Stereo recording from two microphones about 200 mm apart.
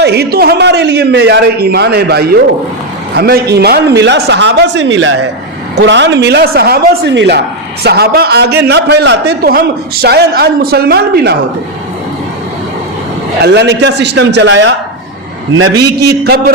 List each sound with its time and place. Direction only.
0.0 s a man's voice: 55° right (ahead or behind)
13.4 s speech: 60° right (ahead or behind)
15.8 s a man's voice: 55° right (ahead or behind)